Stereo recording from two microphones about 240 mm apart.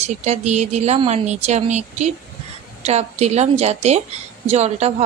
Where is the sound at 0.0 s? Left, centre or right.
Right.